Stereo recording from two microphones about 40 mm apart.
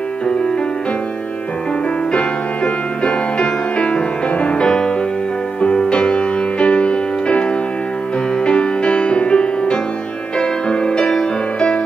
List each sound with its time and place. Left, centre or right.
2.1 s music: left
4.6 s music: centre
5.6 s music: left
8.5 s music: left